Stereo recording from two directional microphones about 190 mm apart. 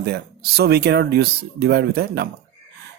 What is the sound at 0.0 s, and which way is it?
Speech, 60° right (ahead or behind).